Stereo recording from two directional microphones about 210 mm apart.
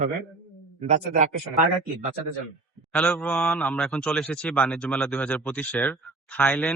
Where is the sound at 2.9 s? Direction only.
5° left (ahead or behind).